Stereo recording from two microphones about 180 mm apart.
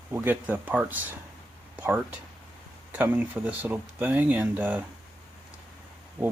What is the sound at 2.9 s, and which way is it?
A man's voice, 10° right (ahead or behind).